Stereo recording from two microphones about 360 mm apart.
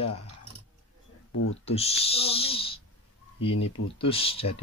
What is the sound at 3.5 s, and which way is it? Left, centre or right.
Speech, left.